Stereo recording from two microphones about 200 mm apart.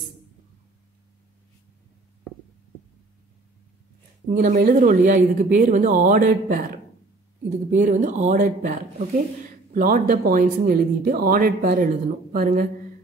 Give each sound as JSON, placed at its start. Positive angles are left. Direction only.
{"t": 4.3, "sound": "speech", "side_deg": -40}